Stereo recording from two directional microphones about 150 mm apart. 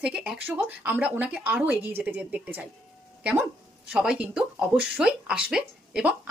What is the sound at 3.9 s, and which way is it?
A woman's voice, 5° right (ahead or behind).